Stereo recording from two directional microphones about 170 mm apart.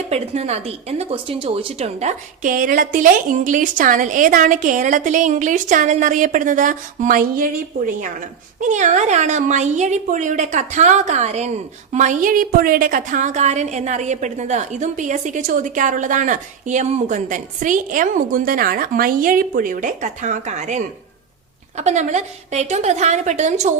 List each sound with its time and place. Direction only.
0.1 s speech: 40° right (ahead or behind); by 7.5 s 55° right (ahead or behind)
8.6 s speech: 45° right (ahead or behind)